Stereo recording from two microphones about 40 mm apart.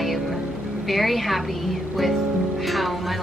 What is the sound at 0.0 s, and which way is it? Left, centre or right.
Music, centre.